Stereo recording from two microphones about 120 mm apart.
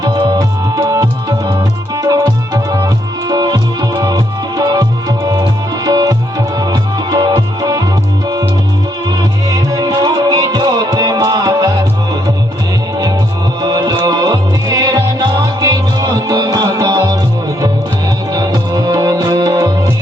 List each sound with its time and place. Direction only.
0.0 s music: 40° right (ahead or behind)
5.3 s tabla: 30° right (ahead or behind)
6.6 s music: 30° right (ahead or behind)
9.5 s music: 30° right (ahead or behind)
13.6 s music: 35° right (ahead or behind)
18.3 s music: 30° right (ahead or behind)